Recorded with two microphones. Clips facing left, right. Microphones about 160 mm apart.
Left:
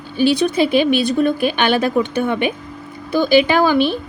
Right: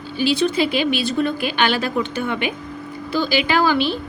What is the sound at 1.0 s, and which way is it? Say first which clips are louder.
A woman's voice: left 5 dB; 15° left (ahead or behind).